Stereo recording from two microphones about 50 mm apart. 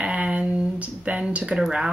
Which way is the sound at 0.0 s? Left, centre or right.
Right.